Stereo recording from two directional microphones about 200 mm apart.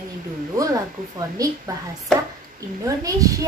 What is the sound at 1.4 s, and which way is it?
Speech, 15° right (ahead or behind).